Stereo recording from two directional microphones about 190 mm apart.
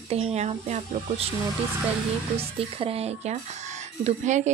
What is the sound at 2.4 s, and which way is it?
A woman's voice, 30° right (ahead or behind).